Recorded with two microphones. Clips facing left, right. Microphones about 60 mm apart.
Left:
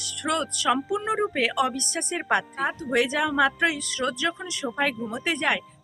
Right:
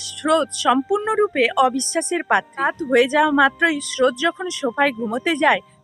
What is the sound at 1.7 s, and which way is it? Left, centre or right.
Speech, right.